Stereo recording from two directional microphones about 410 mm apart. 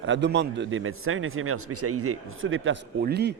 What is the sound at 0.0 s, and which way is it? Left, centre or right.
A man's voice, right.